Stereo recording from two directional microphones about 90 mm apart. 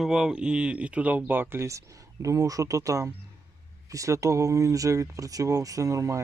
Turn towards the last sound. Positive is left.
turn(degrees=-40)  # may be behind; listen again after turning